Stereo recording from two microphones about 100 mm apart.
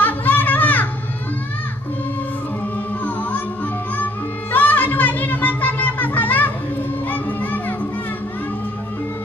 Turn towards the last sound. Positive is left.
turn(degrees=15)  # may be behind; listen again after turning